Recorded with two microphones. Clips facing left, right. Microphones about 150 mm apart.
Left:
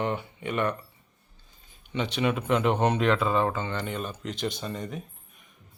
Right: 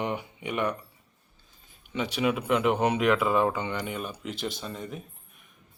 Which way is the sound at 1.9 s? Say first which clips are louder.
Even; 5° right (ahead or behind).